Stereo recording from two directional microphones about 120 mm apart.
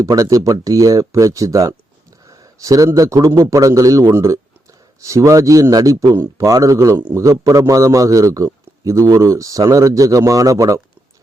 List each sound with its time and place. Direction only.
0.0 s a man's voice: 25° right (ahead or behind)